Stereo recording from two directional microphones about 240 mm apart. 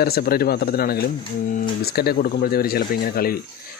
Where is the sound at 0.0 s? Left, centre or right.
Left.